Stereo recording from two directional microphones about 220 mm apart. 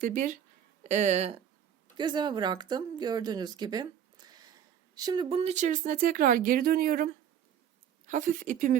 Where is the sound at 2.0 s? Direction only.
20° right (ahead or behind).